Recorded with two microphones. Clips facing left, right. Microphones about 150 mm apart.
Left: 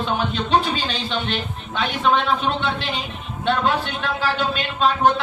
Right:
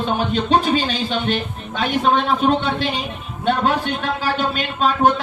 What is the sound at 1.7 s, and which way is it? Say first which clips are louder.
Speech: right 2 dB; 45° right (ahead or behind).